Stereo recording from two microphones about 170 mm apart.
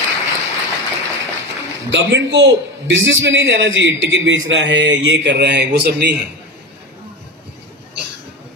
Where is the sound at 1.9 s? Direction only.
90° right.